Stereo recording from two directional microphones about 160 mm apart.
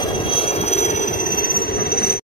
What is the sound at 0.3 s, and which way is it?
Train, 35° left (ahead or behind).